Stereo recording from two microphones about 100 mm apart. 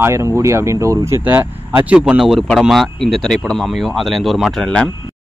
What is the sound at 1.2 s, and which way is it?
Speech, 20° right (ahead or behind).